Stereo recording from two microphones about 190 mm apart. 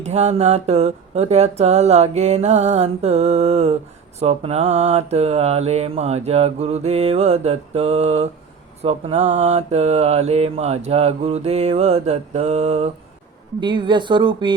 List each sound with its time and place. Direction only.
0.0 s mantra: 35° right (ahead or behind)
13.6 s speech: 25° right (ahead or behind)